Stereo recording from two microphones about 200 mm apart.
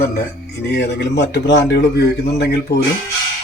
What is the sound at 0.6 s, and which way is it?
Speech, 55° left (ahead or behind).